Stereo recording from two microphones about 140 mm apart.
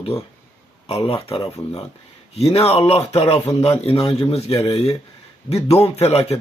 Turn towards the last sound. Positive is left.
turn(degrees=50)  # may be behind; listen again after turning